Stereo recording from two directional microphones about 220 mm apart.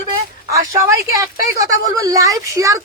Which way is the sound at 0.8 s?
15° right (ahead or behind).